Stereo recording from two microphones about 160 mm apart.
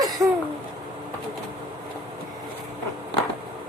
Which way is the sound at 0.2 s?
20° right (ahead or behind).